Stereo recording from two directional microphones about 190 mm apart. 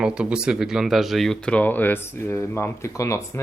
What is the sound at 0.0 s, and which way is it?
Speech, 5° right (ahead or behind).